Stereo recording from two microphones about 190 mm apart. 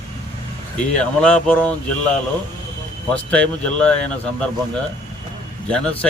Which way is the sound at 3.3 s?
5° left (ahead or behind).